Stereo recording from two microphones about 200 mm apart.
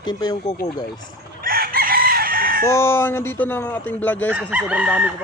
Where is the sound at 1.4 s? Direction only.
45° right (ahead or behind).